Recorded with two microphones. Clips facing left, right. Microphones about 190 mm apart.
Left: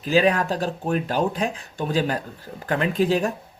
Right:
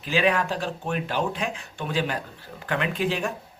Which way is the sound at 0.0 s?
40° left (ahead or behind).